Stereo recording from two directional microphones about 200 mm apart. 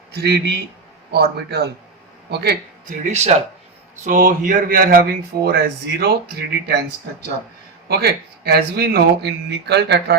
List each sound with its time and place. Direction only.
0.1 s speech: 55° right (ahead or behind)
3.0 s speech: 35° right (ahead or behind); by 6.1 s 55° right (ahead or behind)
7.9 s speech: 55° right (ahead or behind)